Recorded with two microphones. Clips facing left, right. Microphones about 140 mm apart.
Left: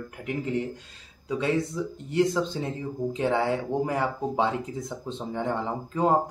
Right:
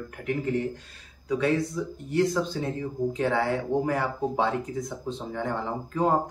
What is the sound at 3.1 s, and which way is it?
Speech, 20° left (ahead or behind).